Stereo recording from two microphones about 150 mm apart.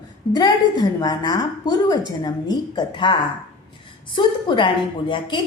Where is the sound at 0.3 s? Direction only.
25° left (ahead or behind).